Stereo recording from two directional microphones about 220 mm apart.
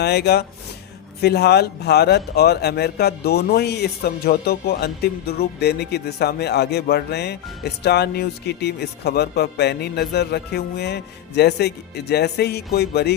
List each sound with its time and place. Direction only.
0.0 s speech: 50° left (ahead or behind)